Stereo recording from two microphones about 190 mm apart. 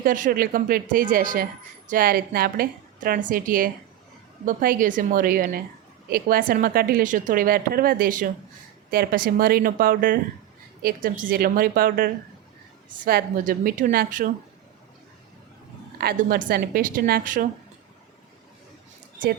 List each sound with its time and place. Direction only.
0.0 s a woman's voice: 50° right (ahead or behind)
16.0 s a woman's voice: 55° right (ahead or behind)